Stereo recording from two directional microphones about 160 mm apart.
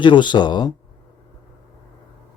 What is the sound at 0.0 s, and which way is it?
Speech, 30° left (ahead or behind).